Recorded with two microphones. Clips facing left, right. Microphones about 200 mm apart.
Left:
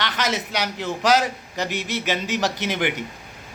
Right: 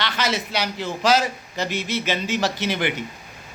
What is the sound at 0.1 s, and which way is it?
A man's voice, 15° left (ahead or behind).